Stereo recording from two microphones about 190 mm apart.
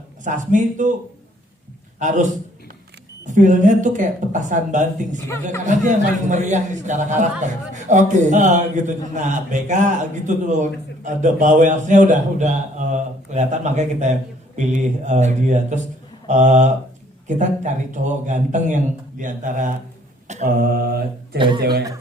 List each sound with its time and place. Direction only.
0.3 s a man's voice: 40° right (ahead or behind)
2.0 s a man's voice: 40° right (ahead or behind)
20.2 s mantra: 40° right (ahead or behind)
21.3 s speech: 25° right (ahead or behind)
21.6 s speech: 55° right (ahead or behind)